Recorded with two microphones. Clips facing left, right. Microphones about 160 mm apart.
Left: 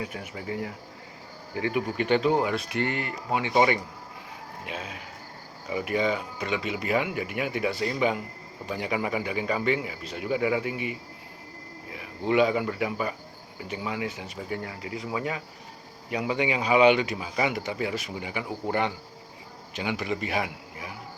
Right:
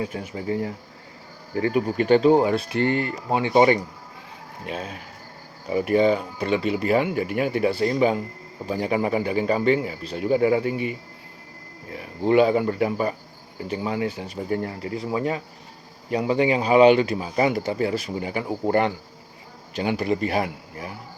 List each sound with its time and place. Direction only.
0.0 s speech: 30° right (ahead or behind)
12.3 s speech: 40° right (ahead or behind)